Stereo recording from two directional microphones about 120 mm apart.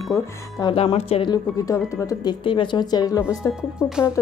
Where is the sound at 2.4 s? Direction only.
45° left (ahead or behind).